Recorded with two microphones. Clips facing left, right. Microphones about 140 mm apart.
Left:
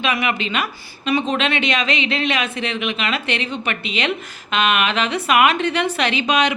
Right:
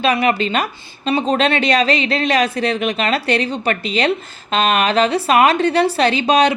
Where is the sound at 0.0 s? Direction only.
35° right (ahead or behind).